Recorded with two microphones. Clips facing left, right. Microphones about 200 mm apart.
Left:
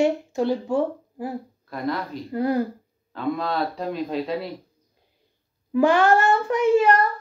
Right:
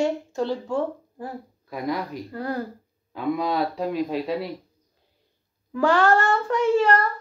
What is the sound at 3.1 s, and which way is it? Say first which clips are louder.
Speech: right 1 dB; 10° right (ahead or behind).